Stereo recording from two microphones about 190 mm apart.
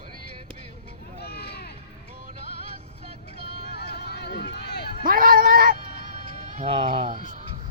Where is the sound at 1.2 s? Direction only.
55° left (ahead or behind).